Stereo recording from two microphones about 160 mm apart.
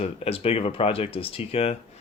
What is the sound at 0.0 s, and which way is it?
Speech, 40° left (ahead or behind).